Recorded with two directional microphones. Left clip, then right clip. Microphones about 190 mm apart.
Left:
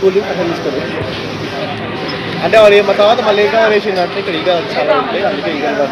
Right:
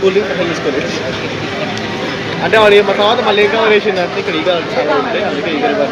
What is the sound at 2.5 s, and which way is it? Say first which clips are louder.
Speech: left 2 dB; 15° left (ahead or behind).